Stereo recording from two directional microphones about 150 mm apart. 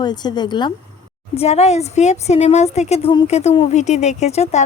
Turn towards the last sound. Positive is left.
turn(degrees=45)  # may be behind; listen again after turning